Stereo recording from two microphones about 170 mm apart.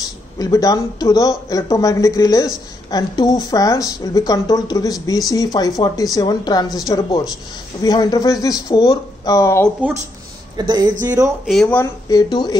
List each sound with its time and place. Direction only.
0.4 s speech: 20° left (ahead or behind)
10.5 s speech: 25° right (ahead or behind)
11.4 s speech: centre (ahead or behind)
11.8 s speech: 20° left (ahead or behind)